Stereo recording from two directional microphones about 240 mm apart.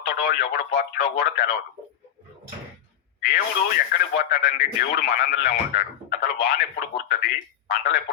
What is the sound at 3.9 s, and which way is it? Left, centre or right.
Speech, left.